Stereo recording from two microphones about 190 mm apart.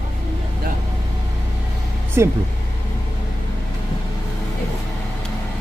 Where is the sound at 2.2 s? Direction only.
15° right (ahead or behind).